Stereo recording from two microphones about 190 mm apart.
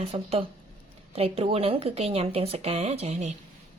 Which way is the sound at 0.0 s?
30° right (ahead or behind).